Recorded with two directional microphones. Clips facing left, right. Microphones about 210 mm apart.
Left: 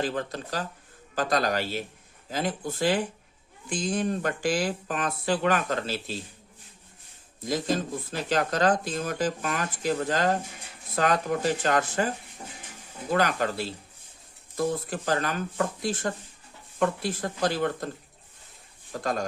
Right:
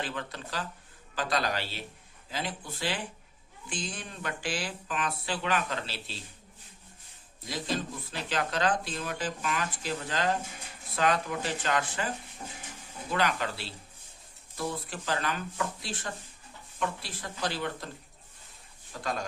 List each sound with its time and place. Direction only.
0.0 s speech: 40° left (ahead or behind)
7.4 s speech: 45° left (ahead or behind)
13.1 s speech: 45° left (ahead or behind)